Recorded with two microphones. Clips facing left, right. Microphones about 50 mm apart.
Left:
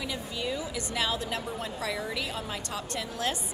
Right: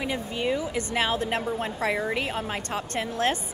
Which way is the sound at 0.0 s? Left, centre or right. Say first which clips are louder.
Right 6 dB; right.